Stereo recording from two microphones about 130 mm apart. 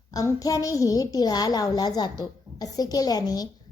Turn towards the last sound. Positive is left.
turn(degrees=30)  # may be behind; listen again after turning